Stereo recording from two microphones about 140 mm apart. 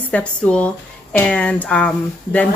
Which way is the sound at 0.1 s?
10° left (ahead or behind).